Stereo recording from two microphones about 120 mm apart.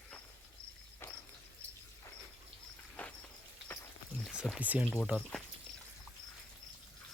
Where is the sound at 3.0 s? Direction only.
15° left (ahead or behind).